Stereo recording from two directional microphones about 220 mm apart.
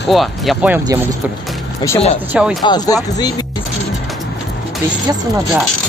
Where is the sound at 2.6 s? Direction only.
15° left (ahead or behind).